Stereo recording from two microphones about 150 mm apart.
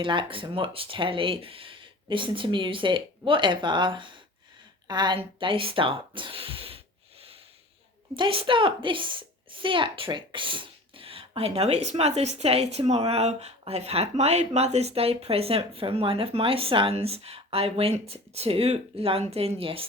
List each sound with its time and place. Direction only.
0.0 s a woman's voice: 35° right (ahead or behind)
4.9 s a sound: 30° right (ahead or behind)
8.1 s a woman's voice: 35° right (ahead or behind)